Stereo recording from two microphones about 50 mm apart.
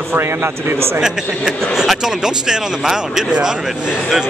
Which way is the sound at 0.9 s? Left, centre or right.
Centre.